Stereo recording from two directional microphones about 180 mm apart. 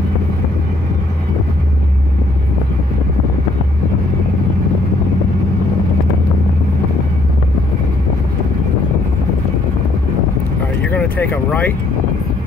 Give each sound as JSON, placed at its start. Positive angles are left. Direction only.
{"t": 10.9, "sound": "speech", "side_deg": 10}